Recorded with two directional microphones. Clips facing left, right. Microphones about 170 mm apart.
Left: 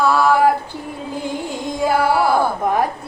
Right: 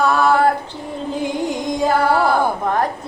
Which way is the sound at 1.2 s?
15° right (ahead or behind).